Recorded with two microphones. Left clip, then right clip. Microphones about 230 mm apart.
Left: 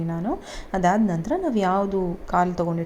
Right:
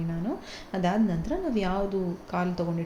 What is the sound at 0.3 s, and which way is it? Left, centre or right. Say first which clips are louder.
A woman's voice: left 6 dB; centre.